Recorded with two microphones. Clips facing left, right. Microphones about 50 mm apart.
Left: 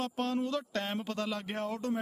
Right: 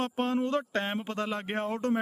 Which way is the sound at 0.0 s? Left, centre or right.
Right.